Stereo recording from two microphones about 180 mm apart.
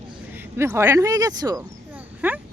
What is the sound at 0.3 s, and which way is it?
Speech, 10° right (ahead or behind).